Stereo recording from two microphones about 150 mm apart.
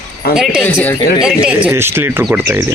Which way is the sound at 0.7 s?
15° left (ahead or behind).